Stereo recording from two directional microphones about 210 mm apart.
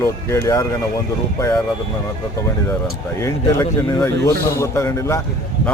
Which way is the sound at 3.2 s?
15° left (ahead or behind).